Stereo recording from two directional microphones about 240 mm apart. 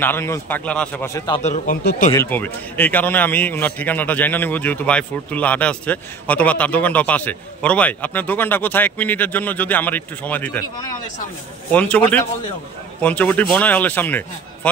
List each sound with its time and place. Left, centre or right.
0.0 s a man's voice: centre
1.4 s speech: left
2.1 s a man's voice: centre